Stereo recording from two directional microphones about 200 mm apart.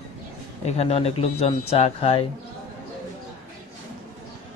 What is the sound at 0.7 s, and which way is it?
Speech, 30° left (ahead or behind).